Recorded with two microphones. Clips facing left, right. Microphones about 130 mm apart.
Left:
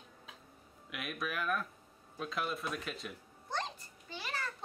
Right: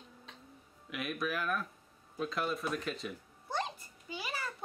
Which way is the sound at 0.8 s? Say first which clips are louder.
Right 4 dB; centre (ahead or behind).